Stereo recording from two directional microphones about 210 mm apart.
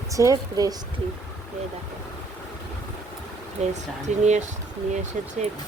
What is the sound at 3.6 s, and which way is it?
Speech, 35° right (ahead or behind).